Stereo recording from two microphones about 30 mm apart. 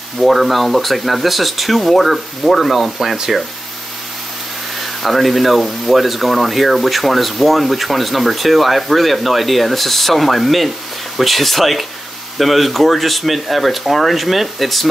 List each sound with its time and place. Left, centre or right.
0.2 s speech: centre
5.0 s speech: centre